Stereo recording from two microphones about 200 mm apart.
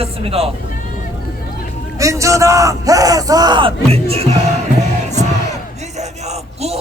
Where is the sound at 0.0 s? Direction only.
30° right (ahead or behind).